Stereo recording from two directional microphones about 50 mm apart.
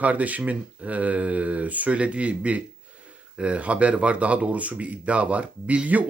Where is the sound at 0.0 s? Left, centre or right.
Right.